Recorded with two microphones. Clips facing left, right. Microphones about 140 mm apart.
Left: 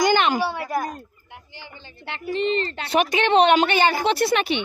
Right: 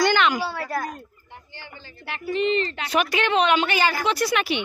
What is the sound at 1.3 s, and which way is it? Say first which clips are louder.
A child's voice: even; 10° left (ahead or behind).